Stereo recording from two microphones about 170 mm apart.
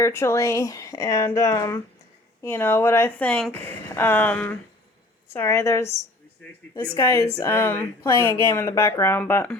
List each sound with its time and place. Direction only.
0.0 s a woman's voice: 15° left (ahead or behind)